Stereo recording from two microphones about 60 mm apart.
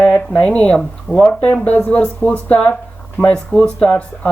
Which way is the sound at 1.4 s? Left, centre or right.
Left.